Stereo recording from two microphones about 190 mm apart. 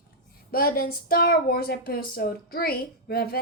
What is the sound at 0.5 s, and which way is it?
A woman's voice, 50° left (ahead or behind).